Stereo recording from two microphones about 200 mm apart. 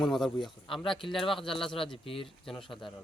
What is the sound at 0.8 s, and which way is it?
Speech, 25° left (ahead or behind).